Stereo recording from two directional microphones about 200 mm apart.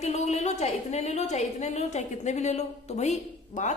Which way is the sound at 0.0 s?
35° left (ahead or behind).